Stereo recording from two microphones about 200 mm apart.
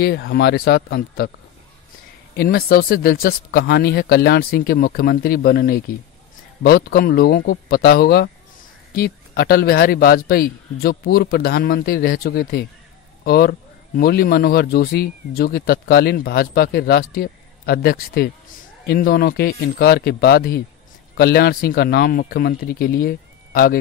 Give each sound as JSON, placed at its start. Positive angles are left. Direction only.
{"t": 0.0, "sound": "a man's voice", "side_deg": 50}
{"t": 2.3, "sound": "a man's voice", "side_deg": 50}